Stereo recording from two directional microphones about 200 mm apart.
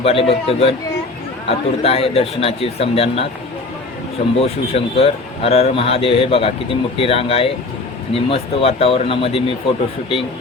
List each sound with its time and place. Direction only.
0.0 s speech: 30° left (ahead or behind)
4.4 s speech: 30° left (ahead or behind)